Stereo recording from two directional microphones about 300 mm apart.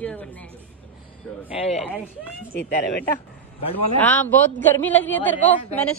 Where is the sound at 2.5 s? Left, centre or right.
Left.